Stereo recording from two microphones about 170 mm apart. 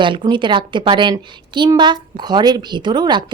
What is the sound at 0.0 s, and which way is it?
A woman's voice, 30° right (ahead or behind).